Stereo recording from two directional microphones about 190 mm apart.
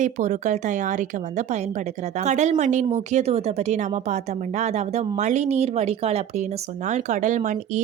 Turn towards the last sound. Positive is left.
turn(degrees=-40)  # may be behind; listen again after turning